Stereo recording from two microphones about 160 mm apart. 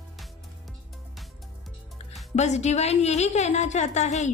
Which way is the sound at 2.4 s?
45° left (ahead or behind).